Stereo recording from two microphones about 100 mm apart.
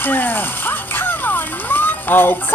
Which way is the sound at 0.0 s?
20° left (ahead or behind).